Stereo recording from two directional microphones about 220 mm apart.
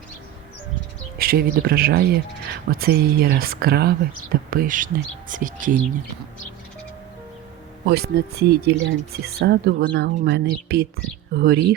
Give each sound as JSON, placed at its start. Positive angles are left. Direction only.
{"t": 1.2, "sound": "speech", "side_deg": -45}
{"t": 7.9, "sound": "speech", "side_deg": -45}